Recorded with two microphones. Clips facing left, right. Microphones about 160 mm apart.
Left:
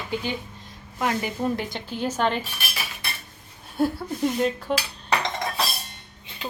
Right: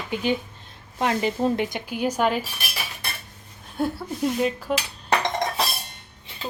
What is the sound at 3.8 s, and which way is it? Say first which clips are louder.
Dishes: left 1 dB; centre (ahead or behind).